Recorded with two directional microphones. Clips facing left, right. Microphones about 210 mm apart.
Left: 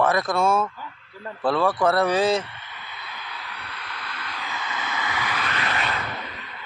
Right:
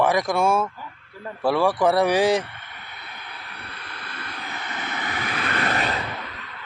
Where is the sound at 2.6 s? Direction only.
55° right (ahead or behind).